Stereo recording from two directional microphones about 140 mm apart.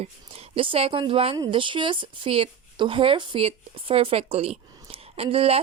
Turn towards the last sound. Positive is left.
turn(degrees=-45)  # may be behind; listen again after turning